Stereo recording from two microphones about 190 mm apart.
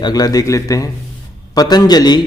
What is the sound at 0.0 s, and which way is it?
A man's voice, 20° left (ahead or behind).